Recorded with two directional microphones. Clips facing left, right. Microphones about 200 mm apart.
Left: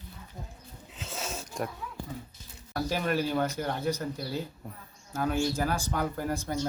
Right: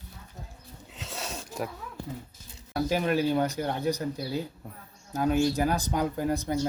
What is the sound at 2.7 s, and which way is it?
Speech, 15° right (ahead or behind).